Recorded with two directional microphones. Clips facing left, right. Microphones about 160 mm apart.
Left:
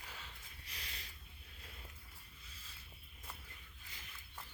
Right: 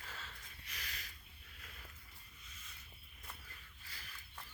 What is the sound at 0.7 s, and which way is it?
Snort, 30° left (ahead or behind).